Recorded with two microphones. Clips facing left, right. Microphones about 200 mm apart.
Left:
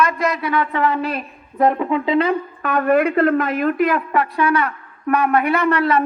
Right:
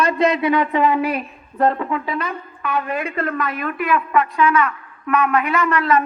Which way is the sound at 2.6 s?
50° left (ahead or behind).